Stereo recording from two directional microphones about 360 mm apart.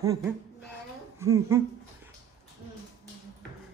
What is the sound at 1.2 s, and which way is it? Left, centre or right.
Humming, centre.